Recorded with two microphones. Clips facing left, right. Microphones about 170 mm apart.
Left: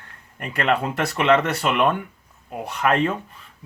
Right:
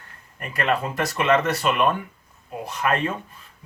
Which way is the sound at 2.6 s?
65° left (ahead or behind).